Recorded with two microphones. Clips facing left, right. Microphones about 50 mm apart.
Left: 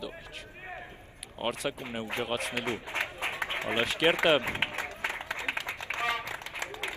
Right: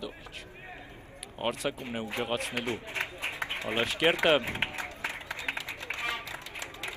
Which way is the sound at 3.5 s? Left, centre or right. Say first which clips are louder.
Left 2 dB; left.